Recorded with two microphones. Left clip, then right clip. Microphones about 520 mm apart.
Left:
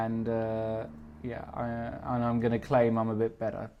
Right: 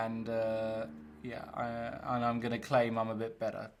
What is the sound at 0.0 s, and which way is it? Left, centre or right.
Speech, left.